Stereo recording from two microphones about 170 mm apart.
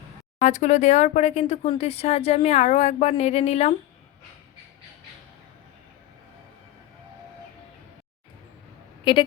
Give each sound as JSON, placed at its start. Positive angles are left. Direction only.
{"t": 0.4, "sound": "speech", "side_deg": 45}
{"t": 9.1, "sound": "a woman's voice", "side_deg": 30}